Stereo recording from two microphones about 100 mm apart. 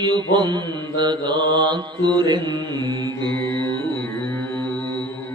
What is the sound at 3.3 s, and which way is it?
Carnatic music, 20° left (ahead or behind).